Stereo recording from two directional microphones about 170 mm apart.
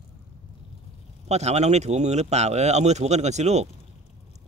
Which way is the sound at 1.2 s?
40° right (ahead or behind).